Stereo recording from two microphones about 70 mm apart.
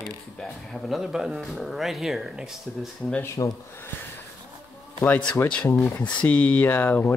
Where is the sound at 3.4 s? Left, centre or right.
Left.